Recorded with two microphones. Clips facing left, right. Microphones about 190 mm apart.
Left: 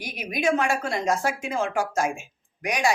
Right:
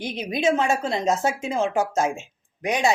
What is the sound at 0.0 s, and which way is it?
Speech, 25° right (ahead or behind).